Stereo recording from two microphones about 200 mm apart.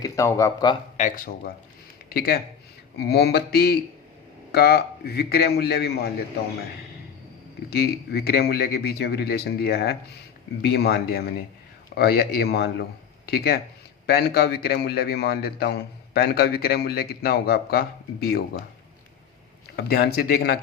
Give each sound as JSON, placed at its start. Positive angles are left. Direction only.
{"t": 0.0, "sound": "speech", "side_deg": 15}
{"t": 0.9, "sound": "a man's voice", "side_deg": 40}
{"t": 7.7, "sound": "a man's voice", "side_deg": 50}
{"t": 19.7, "sound": "a man's voice", "side_deg": 50}